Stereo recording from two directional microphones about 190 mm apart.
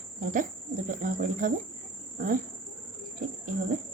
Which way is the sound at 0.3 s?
45° right (ahead or behind).